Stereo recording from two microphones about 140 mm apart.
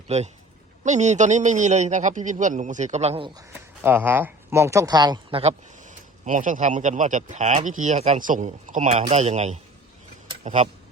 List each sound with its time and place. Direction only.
0.1 s speech: 55° right (ahead or behind)
3.8 s speech: 15° right (ahead or behind)
5.4 s speech: 55° right (ahead or behind)
8.2 s a man's voice: 65° right (ahead or behind)